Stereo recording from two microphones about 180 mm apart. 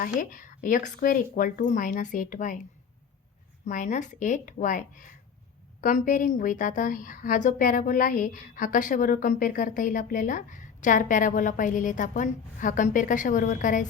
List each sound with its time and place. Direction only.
0.2 s a woman's voice: 50° left (ahead or behind)
3.7 s a woman's voice: 45° left (ahead or behind)